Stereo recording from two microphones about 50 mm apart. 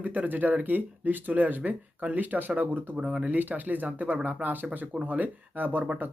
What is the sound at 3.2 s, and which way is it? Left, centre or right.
Speech, right.